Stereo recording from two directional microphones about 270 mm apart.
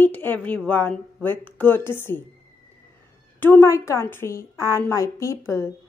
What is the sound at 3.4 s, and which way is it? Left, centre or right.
A woman's voice, centre.